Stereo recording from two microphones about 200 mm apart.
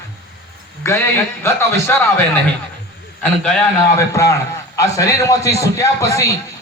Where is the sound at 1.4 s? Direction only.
10° left (ahead or behind).